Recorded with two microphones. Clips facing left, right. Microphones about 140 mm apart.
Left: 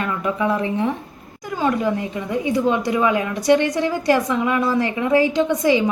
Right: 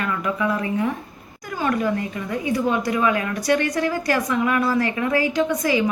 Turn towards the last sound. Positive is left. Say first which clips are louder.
# left 3 dB
turn(degrees=20)  # may be behind; listen again after turning